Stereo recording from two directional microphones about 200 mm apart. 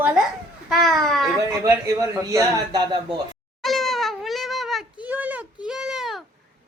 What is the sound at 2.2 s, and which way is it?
Speech, 15° right (ahead or behind).